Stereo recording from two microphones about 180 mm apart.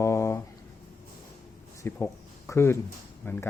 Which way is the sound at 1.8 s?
15° left (ahead or behind).